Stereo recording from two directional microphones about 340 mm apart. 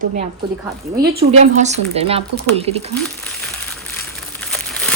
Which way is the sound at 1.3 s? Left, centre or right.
Centre.